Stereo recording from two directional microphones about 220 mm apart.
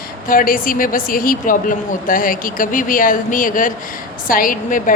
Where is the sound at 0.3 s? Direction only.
40° left (ahead or behind).